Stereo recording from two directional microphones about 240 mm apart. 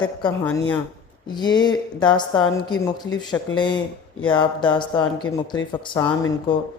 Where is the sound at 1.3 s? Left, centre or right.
Centre.